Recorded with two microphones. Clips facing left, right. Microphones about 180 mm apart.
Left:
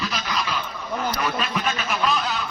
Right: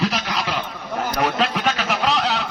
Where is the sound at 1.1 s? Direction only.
65° right (ahead or behind).